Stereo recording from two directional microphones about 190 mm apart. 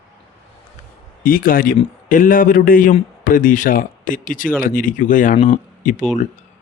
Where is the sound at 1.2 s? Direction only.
50° left (ahead or behind).